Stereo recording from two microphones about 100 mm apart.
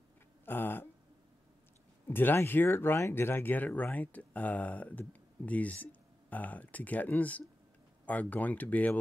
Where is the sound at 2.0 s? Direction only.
20° left (ahead or behind).